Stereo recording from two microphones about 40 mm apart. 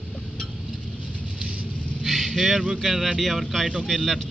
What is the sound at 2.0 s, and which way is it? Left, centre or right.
Vehicle, centre.